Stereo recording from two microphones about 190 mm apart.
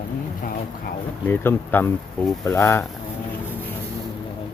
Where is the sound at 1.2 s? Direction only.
10° left (ahead or behind).